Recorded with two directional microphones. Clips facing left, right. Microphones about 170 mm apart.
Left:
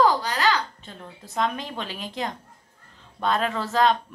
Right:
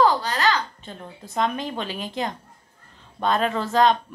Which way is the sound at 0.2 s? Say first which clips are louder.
Right 1 dB; 10° left (ahead or behind).